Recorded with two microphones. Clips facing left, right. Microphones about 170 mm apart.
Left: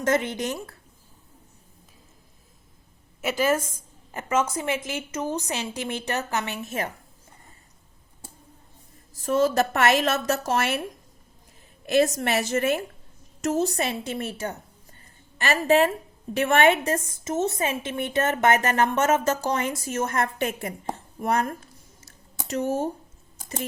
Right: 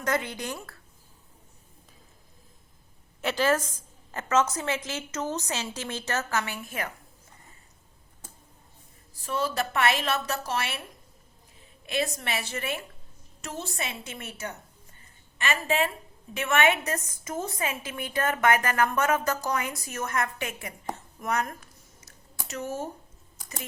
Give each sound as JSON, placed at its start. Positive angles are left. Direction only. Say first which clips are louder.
{"t": 0.0, "sound": "a woman's voice", "louder": "left 5 dB", "side_deg": 25}
{"t": 3.2, "sound": "a woman's voice", "louder": "left 2 dB", "side_deg": 10}
{"t": 9.2, "sound": "a woman's voice", "louder": "left 8 dB", "side_deg": 45}
{"t": 11.9, "sound": "a woman's voice", "louder": "left 9 dB", "side_deg": 45}